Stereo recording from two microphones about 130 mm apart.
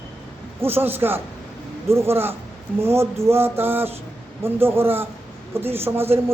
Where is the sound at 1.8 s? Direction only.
20° right (ahead or behind).